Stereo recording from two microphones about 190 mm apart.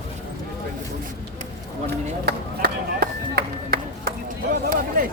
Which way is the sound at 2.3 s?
55° right (ahead or behind).